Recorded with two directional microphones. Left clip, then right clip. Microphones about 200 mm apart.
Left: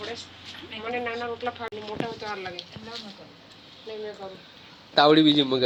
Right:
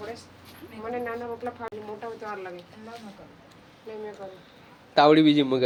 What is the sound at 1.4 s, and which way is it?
Speech, centre (ahead or behind).